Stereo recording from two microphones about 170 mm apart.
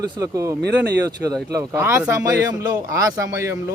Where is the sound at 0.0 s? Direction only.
20° right (ahead or behind).